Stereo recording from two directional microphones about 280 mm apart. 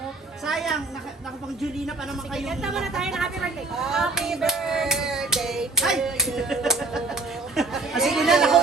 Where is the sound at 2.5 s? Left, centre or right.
Centre.